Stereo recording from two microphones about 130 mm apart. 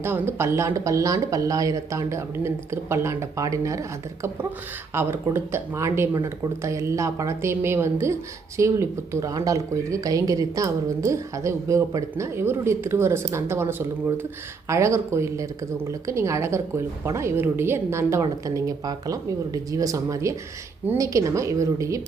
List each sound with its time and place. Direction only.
0.0 s a woman's voice: 20° right (ahead or behind)